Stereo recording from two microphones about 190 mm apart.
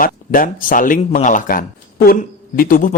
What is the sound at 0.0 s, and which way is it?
A man's voice, 45° left (ahead or behind).